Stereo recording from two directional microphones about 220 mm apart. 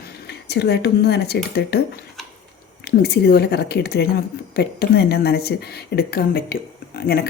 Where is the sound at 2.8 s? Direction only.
45° left (ahead or behind).